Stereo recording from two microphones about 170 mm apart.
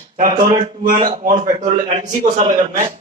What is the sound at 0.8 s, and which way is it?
A man's voice, 55° right (ahead or behind).